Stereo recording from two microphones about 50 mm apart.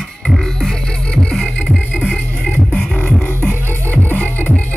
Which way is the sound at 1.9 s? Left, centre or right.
Left.